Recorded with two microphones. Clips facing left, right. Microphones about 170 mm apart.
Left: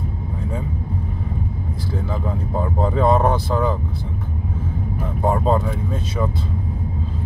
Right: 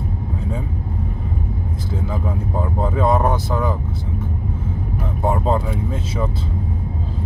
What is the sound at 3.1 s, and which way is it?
Speech, 20° left (ahead or behind).